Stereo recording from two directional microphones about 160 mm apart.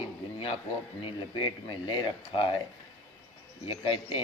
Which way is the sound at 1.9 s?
30° left (ahead or behind).